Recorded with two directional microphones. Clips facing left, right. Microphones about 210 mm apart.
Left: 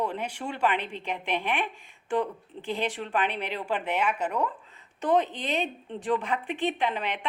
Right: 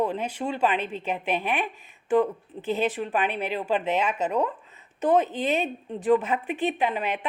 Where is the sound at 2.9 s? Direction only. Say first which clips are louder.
Right 2 dB; 20° right (ahead or behind).